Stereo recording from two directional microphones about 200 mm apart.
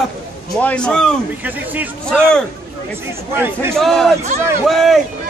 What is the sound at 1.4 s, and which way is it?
Speech, 10° right (ahead or behind).